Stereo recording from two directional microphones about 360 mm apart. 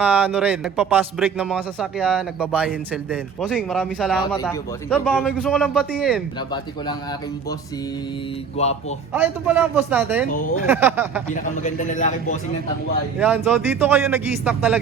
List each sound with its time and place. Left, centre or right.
0.0 s speech: centre
8.6 s speech: centre
9.1 s speech: centre
10.2 s a man's voice: left
10.7 s speech: centre
11.6 s a man's voice: left
13.1 s speech: centre